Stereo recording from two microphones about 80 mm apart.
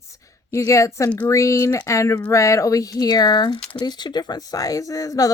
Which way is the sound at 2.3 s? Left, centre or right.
Left.